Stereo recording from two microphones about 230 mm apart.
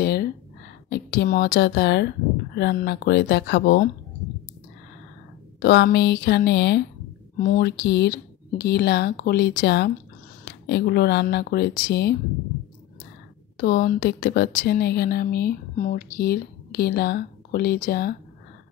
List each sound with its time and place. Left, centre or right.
0.0 s a sound: left
0.8 s speech: left
5.6 s speech: left
13.6 s speech: left